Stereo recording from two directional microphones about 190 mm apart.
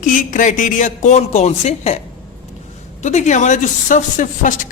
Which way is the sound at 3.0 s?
40° left (ahead or behind).